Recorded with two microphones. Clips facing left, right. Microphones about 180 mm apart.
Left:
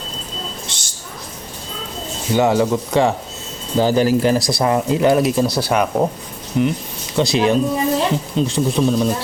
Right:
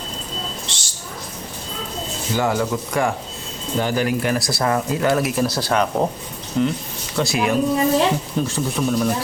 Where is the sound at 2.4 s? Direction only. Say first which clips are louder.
Left 5 dB; 25° left (ahead or behind).